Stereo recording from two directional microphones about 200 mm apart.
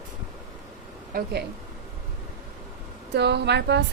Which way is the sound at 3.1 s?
55° right (ahead or behind).